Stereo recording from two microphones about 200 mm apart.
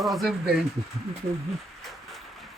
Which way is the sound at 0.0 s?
Centre (ahead or behind).